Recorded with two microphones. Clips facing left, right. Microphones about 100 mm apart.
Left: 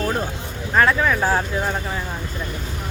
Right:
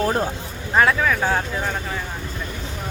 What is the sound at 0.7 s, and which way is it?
Speech, 5° right (ahead or behind).